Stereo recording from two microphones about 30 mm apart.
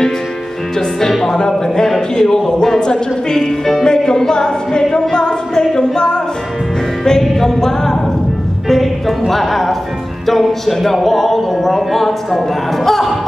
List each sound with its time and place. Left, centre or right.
1.2 s music: centre
1.8 s a man's voice: centre
2.8 s music: left
7.1 s music: centre
9.3 s a man's voice: centre